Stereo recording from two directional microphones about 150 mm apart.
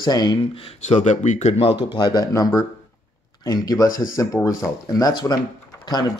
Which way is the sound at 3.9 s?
65° left (ahead or behind).